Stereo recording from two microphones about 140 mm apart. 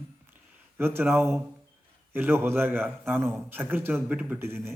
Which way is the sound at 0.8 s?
15° right (ahead or behind).